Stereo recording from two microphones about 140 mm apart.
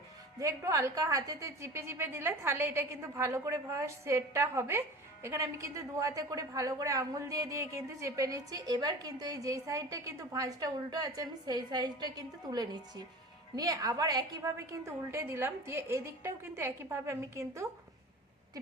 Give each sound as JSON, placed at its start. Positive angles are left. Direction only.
{"t": 0.3, "sound": "a woman's voice", "side_deg": -20}